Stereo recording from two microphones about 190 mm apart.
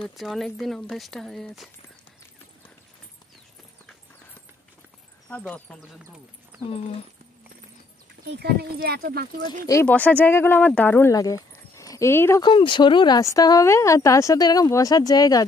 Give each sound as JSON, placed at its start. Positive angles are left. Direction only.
{"t": 0.0, "sound": "speech", "side_deg": 0}
{"t": 5.3, "sound": "speech", "side_deg": 5}
{"t": 8.3, "sound": "speech", "side_deg": -55}
{"t": 9.7, "sound": "speech", "side_deg": 10}
{"t": 12.4, "sound": "speech", "side_deg": 25}